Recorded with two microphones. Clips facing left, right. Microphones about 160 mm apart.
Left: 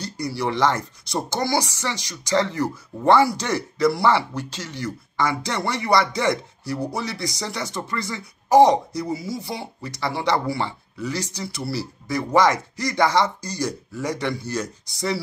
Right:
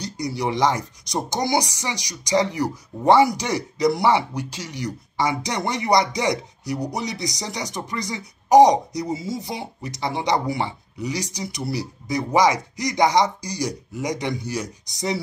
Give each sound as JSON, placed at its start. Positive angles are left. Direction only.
{"t": 0.0, "sound": "speech", "side_deg": -20}